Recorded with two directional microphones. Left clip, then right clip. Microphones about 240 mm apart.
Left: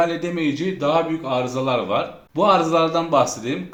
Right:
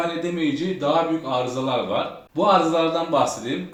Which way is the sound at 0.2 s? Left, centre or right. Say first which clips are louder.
Left 1 dB; left.